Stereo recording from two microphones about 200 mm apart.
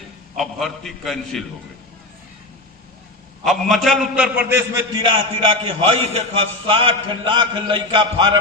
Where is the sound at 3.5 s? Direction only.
Centre (ahead or behind).